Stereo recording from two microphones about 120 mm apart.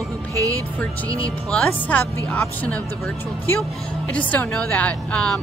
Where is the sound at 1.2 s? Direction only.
10° left (ahead or behind).